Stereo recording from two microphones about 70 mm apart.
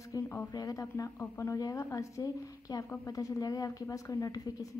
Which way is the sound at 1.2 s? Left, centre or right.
Left.